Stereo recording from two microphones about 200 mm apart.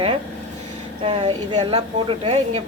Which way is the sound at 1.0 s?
25° right (ahead or behind).